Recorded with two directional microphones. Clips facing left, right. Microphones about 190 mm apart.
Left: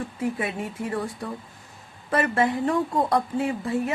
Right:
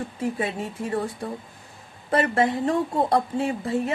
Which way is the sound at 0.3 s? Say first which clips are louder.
Right 1 dB; 30° right (ahead or behind).